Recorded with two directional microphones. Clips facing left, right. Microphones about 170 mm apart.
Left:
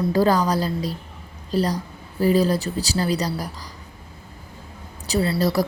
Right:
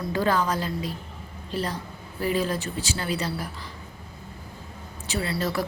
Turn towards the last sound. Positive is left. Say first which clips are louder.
# left 7 dB
turn(degrees=35)  # may be behind; listen again after turning